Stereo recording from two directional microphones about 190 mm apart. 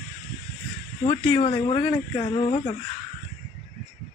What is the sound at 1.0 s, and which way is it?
Speech, 30° left (ahead or behind).